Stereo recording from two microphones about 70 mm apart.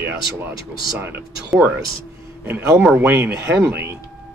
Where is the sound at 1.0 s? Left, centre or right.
Right.